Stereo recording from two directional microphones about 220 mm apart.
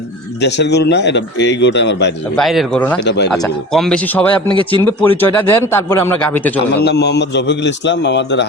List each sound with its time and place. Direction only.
0.4 s a man's voice: 50° left (ahead or behind)
2.3 s speech: centre (ahead or behind)
3.0 s a man's voice: 50° left (ahead or behind)
3.3 s speech: centre (ahead or behind)
6.7 s a man's voice: 50° left (ahead or behind)